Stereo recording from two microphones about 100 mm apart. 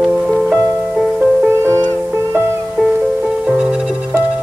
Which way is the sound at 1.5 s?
25° right (ahead or behind).